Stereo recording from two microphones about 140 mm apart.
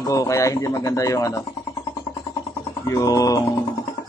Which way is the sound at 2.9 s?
25° left (ahead or behind).